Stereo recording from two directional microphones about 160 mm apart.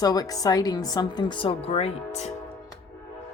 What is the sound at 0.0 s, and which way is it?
A woman's voice, 25° left (ahead or behind).